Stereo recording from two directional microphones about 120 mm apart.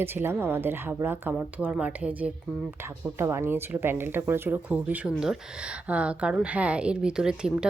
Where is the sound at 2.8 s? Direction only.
20° right (ahead or behind).